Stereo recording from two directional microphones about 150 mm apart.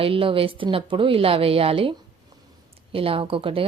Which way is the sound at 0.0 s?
35° right (ahead or behind).